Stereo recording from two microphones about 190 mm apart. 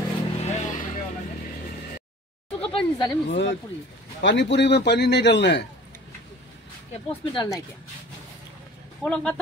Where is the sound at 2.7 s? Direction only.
25° left (ahead or behind).